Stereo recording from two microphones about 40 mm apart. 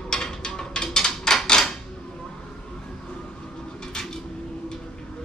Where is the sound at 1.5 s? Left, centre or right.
Centre.